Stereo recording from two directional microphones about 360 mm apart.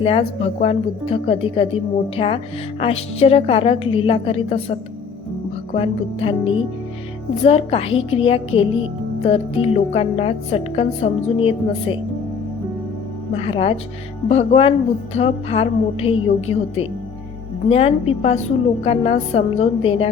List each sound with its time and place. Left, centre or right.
0.0 s a woman's voice: centre
5.7 s a woman's voice: centre
13.3 s a woman's voice: centre